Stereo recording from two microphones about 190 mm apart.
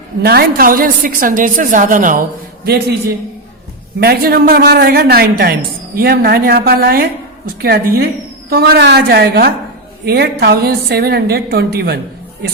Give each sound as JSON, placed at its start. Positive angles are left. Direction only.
{"t": 0.2, "sound": "a woman's voice", "side_deg": -55}
{"t": 2.6, "sound": "a woman's voice", "side_deg": -55}
{"t": 4.0, "sound": "a woman's voice", "side_deg": -55}